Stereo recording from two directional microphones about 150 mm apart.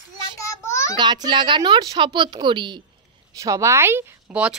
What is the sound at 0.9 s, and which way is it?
Speech, 30° right (ahead or behind).